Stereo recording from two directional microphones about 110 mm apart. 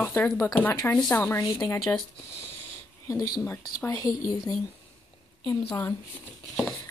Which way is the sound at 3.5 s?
30° left (ahead or behind).